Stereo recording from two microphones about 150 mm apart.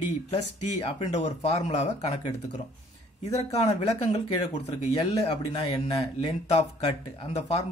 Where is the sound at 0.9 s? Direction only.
50° left (ahead or behind).